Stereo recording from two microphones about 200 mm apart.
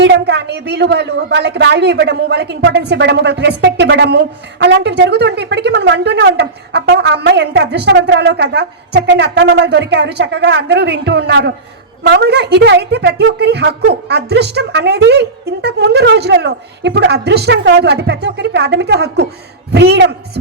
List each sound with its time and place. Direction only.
0.0 s a woman's voice: 55° right (ahead or behind)